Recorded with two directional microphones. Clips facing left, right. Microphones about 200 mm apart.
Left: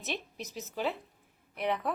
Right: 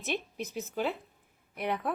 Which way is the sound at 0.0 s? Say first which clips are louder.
Right 4 dB; 50° right (ahead or behind).